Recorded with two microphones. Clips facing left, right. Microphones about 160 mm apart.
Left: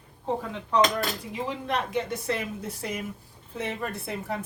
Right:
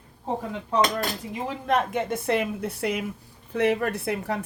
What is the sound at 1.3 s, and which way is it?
A woman's voice, 50° right (ahead or behind).